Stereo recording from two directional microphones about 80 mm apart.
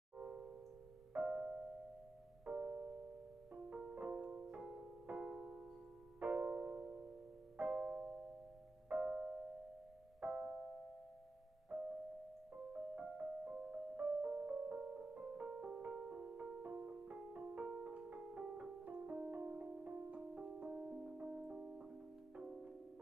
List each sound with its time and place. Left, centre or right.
0.2 s music: centre
6.5 s music: centre
7.5 s music: right
11.7 s music: right
12.5 s music: centre